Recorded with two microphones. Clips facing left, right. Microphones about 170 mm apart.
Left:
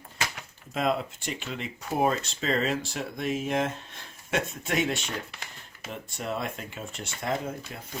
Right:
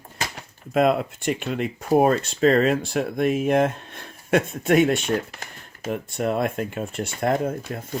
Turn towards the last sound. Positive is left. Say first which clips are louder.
# right 8 dB
turn(degrees=-50)  # may be behind; listen again after turning